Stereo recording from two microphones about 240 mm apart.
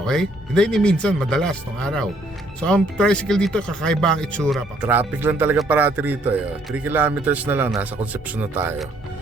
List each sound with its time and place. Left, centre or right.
0.0 s speech: centre